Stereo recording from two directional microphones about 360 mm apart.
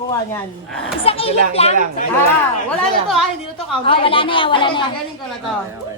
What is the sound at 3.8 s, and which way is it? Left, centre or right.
Speech, centre.